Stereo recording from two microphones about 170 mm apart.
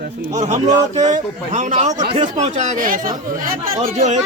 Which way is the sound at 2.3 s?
45° right (ahead or behind).